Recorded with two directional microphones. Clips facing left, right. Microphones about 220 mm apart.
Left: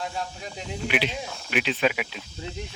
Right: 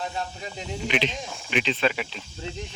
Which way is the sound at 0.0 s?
5° left (ahead or behind).